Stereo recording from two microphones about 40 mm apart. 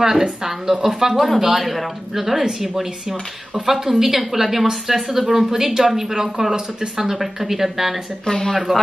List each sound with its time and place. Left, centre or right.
0.0 s speech: centre
8.3 s speech: centre